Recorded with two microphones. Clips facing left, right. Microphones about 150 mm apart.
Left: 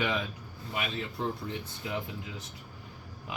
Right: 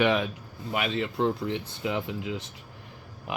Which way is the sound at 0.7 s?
85° right.